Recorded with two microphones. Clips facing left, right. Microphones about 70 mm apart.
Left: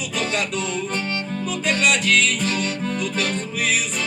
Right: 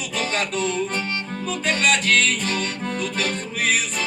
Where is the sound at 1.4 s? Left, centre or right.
Right.